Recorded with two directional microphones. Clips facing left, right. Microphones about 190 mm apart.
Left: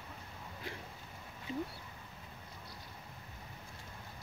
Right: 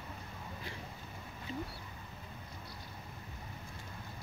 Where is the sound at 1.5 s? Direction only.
10° left (ahead or behind).